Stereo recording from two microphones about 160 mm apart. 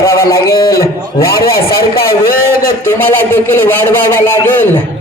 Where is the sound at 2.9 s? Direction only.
15° left (ahead or behind).